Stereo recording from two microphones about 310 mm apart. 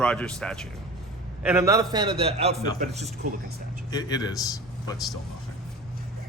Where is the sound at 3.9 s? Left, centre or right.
Centre.